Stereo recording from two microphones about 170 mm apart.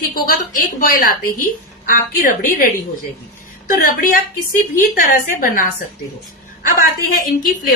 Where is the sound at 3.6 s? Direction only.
55° left (ahead or behind).